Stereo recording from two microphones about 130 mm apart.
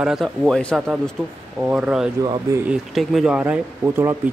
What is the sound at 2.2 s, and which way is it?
Speech, 30° right (ahead or behind).